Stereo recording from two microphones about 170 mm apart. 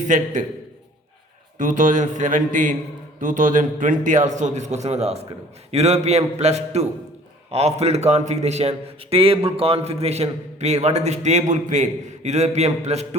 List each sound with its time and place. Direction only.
1.5 s a man's voice: 50° right (ahead or behind)